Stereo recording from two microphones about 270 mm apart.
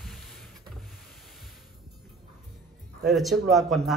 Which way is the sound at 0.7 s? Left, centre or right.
Centre.